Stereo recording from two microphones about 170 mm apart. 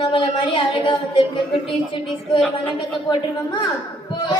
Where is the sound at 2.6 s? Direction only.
25° left (ahead or behind).